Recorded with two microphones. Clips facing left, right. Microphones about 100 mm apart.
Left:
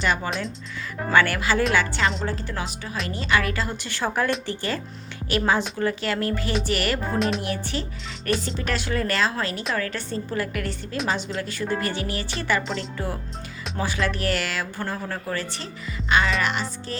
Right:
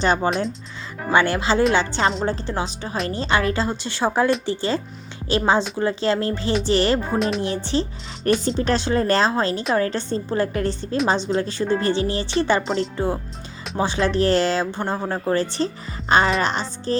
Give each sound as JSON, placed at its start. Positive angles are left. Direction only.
{"t": 0.0, "sound": "a woman's voice", "side_deg": -30}
{"t": 7.2, "sound": "a woman's voice", "side_deg": 0}
{"t": 7.4, "sound": "a woman's voice", "side_deg": -25}